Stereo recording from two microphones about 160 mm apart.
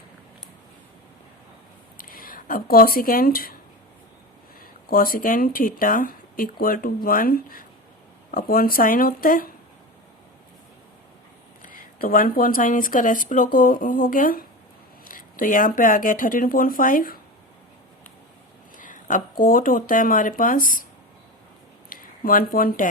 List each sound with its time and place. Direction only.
2.0 s speech: 65° left (ahead or behind)
4.6 s speech: 60° left (ahead or behind)
11.6 s speech: 60° left (ahead or behind)
18.8 s speech: 55° left (ahead or behind)
21.8 s speech: 60° left (ahead or behind)